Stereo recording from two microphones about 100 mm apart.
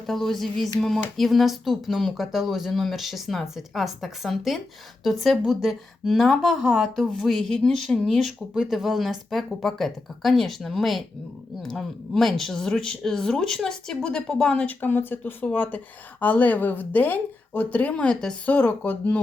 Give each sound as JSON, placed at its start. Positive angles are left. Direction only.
{"t": 0.1, "sound": "speech", "side_deg": 0}